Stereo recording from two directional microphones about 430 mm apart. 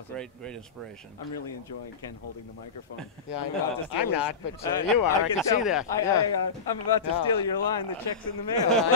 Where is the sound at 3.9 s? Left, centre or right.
Left.